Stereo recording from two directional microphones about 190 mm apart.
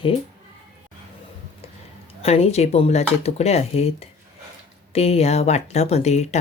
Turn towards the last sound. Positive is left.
turn(degrees=35)  # may be behind; listen again after turning